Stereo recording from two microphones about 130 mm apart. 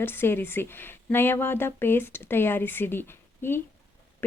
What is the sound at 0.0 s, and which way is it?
Speech, 15° left (ahead or behind).